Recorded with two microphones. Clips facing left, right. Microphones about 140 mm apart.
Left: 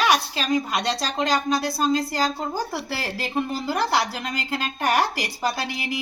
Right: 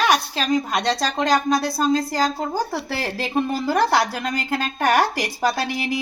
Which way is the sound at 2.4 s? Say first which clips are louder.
Right 3 dB; 50° right (ahead or behind).